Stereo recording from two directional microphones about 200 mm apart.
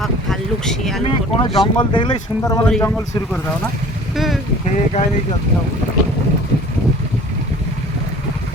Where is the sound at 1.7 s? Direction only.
25° left (ahead or behind).